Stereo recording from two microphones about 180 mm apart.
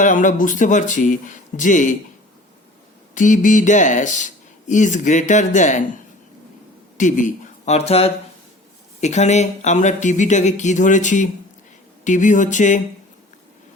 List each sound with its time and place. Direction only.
0.0 s speech: 45° left (ahead or behind)
3.2 s speech: 45° left (ahead or behind)
6.9 s speech: 45° left (ahead or behind)